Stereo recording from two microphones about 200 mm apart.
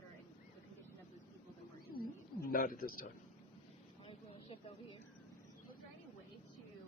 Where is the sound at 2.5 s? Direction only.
45° left (ahead or behind).